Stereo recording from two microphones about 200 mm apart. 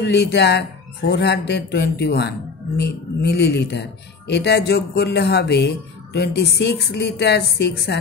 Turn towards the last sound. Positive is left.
turn(degrees=55)  # may be behind; listen again after turning